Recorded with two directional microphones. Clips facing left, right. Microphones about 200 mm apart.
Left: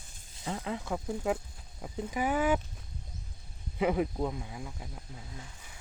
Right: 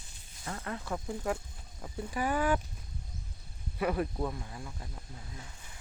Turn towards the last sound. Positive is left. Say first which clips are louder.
# left 2 dB
turn(degrees=10)  # may be behind; listen again after turning